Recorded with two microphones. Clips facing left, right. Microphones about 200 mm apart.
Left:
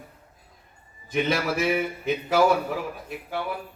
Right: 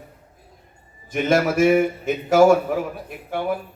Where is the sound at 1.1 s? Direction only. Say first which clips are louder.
Right 5 dB; 45° right (ahead or behind).